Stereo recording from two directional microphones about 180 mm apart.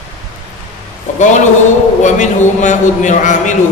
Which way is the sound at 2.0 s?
45° left (ahead or behind).